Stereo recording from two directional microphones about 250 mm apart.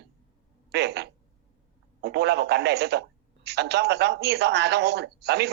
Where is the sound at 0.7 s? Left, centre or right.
Right.